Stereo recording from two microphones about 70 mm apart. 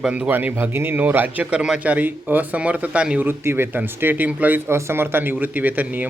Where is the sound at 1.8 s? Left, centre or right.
Right.